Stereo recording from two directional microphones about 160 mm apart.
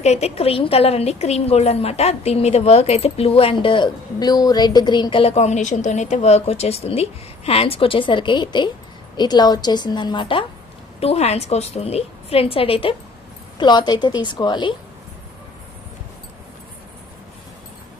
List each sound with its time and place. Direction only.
0.0 s a woman's voice: 40° left (ahead or behind)
11.0 s a woman's voice: 40° left (ahead or behind)